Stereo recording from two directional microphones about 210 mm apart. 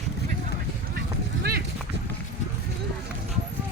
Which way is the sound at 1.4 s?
45° right (ahead or behind).